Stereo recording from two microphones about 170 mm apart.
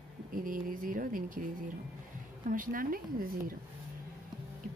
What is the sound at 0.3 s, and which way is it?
Speech, 55° right (ahead or behind).